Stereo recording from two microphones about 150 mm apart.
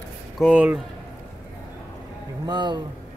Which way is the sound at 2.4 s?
30° right (ahead or behind).